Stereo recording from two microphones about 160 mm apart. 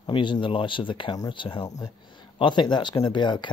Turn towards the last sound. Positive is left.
turn(degrees=30)  # may be behind; listen again after turning